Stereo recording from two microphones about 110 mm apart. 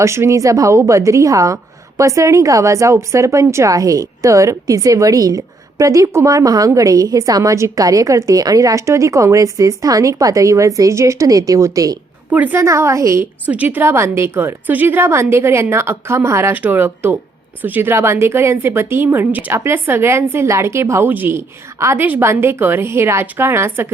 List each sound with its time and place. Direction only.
0.0 s a woman's voice: 25° right (ahead or behind)
12.3 s a woman's voice: 15° right (ahead or behind)
12.5 s a woman's voice: 25° right (ahead or behind)
13.4 s a woman's voice: 15° right (ahead or behind)